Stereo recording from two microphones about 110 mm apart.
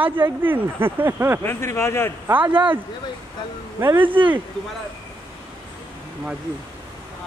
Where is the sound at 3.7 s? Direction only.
20° right (ahead or behind).